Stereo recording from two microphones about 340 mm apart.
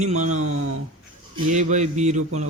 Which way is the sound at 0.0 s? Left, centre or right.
Right.